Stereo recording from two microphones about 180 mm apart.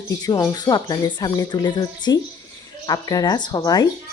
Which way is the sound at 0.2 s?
20° left (ahead or behind).